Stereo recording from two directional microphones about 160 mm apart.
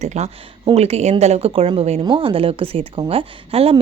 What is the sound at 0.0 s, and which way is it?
A woman's voice, 45° right (ahead or behind).